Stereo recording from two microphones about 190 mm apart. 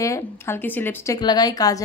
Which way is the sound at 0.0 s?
15° left (ahead or behind).